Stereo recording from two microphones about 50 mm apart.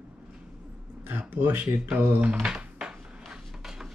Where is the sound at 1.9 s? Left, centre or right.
Right.